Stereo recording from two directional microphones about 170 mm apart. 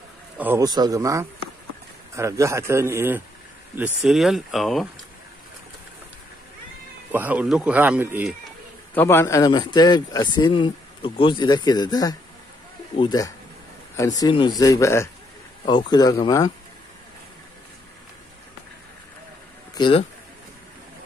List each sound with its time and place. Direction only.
0.4 s speech: 10° right (ahead or behind)
0.7 s a man's voice: 20° right (ahead or behind); by 4.8 s centre (ahead or behind)
7.1 s speech: 10° right (ahead or behind)
8.9 s a man's voice: 15° left (ahead or behind)
19.7 s speech: 30° left (ahead or behind)